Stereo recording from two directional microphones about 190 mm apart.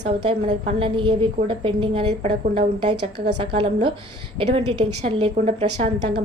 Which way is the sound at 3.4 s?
25° right (ahead or behind).